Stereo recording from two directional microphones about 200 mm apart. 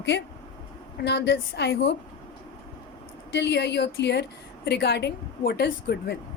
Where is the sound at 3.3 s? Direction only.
60° left (ahead or behind).